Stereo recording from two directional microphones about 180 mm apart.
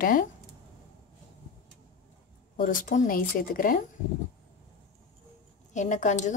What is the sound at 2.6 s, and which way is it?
A woman's voice, 50° left (ahead or behind).